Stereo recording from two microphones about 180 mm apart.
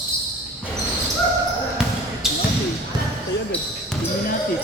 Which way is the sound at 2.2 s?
Centre (ahead or behind).